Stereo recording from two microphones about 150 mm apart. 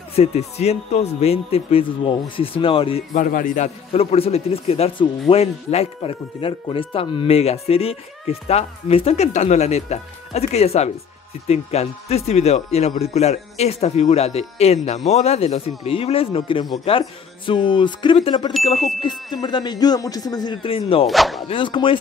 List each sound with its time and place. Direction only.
0.1 s speech: 45° left (ahead or behind)
3.2 s a man's voice: 65° left (ahead or behind)
3.9 s speech: 40° left (ahead or behind)
21.1 s speech: centre (ahead or behind)
21.5 s speech: 35° left (ahead or behind)